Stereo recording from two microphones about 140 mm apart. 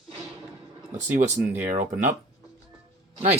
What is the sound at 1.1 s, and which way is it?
Speech, 65° right (ahead or behind).